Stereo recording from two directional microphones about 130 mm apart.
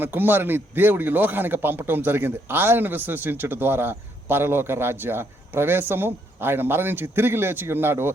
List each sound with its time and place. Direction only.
0.0 s a man's voice: 15° right (ahead or behind)